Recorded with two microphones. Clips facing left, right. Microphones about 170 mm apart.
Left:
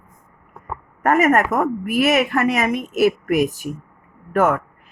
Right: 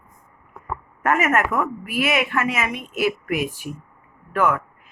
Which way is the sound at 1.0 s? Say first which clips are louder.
Left 4 dB; 35° left (ahead or behind).